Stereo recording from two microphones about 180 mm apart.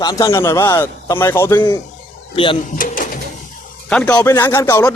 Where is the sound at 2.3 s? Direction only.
30° left (ahead or behind).